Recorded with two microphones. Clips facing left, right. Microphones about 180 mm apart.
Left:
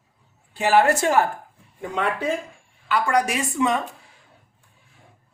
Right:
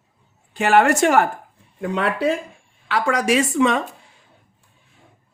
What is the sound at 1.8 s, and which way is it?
Speech, 70° right (ahead or behind).